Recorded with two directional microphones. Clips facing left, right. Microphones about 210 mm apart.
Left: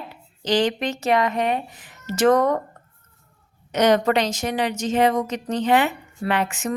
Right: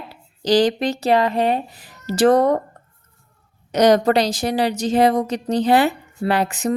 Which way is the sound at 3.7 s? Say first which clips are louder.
Right 3 dB; 35° right (ahead or behind).